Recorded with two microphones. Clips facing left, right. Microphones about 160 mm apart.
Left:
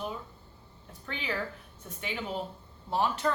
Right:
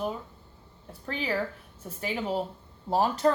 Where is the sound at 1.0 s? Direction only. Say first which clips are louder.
Right 5 dB; 35° right (ahead or behind).